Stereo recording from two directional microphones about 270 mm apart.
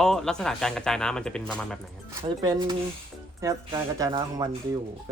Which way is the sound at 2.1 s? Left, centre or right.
Centre.